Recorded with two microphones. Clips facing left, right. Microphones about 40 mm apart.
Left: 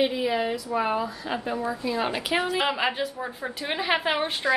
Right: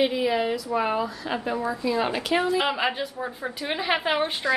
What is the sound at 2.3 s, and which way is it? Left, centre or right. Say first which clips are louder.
A woman's voice: right 2 dB; centre.